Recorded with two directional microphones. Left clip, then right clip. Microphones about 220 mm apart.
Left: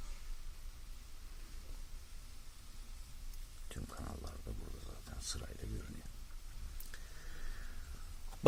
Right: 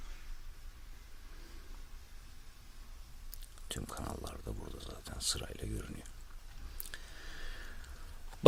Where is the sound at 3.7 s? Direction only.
55° right (ahead or behind).